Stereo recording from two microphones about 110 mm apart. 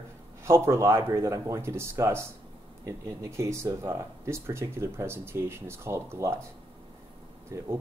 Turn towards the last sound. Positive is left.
turn(degrees=-25)  # may be behind; listen again after turning